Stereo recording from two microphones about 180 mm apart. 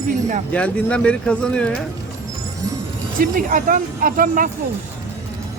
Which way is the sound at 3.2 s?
50° right (ahead or behind).